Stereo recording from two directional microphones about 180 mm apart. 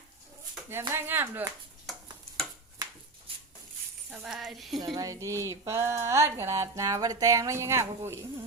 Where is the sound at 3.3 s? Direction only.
30° right (ahead or behind).